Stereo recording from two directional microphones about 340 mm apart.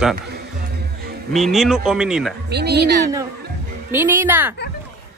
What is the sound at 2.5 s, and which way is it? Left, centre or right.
Speech, right.